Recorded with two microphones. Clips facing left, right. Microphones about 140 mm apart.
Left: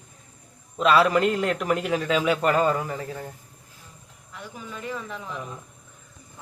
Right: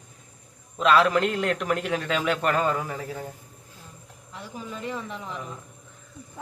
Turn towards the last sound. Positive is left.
turn(degrees=-25)  # may be behind; listen again after turning